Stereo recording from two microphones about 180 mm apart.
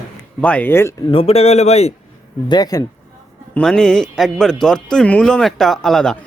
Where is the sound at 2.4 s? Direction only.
20° left (ahead or behind).